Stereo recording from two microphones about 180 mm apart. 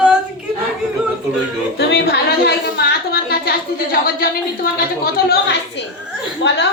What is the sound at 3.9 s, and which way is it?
Speech, 55° left (ahead or behind).